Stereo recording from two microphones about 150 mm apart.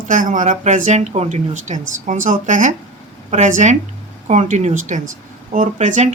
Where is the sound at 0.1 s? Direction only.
60° right (ahead or behind).